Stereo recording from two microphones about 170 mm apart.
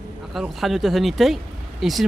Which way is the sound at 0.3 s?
Centre (ahead or behind).